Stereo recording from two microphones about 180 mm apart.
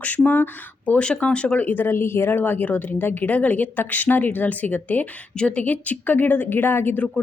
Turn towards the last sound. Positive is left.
turn(degrees=10)  # may be behind; listen again after turning